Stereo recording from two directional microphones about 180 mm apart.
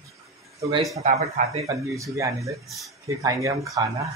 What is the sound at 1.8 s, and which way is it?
Speech, 20° right (ahead or behind).